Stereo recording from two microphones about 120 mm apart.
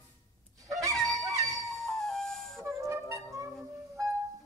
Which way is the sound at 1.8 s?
5° left (ahead or behind).